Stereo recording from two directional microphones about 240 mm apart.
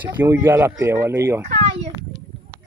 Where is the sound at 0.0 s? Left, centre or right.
Centre.